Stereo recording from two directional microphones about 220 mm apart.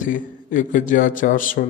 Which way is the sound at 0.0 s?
35° left (ahead or behind).